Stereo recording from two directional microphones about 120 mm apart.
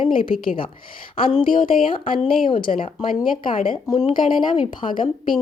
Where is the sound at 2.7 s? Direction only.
75° left (ahead or behind).